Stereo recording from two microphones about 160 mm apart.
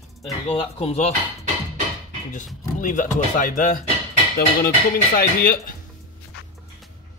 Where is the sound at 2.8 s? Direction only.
55° left (ahead or behind).